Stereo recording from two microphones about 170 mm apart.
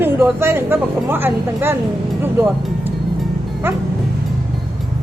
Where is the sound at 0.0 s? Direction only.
15° right (ahead or behind).